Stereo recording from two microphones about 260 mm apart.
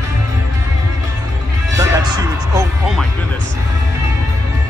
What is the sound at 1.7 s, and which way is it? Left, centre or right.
Speech, centre.